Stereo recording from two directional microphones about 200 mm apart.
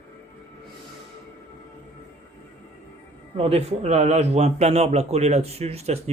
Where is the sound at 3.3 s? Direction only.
30° right (ahead or behind).